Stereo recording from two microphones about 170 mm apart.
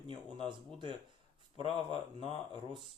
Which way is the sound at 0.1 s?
30° right (ahead or behind).